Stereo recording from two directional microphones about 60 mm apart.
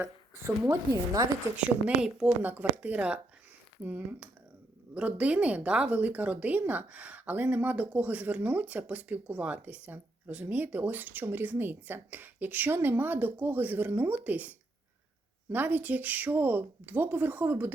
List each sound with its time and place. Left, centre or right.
0.7 s speech: right
1.5 s a woman's voice: centre
2.4 s speech: right
15.5 s speech: right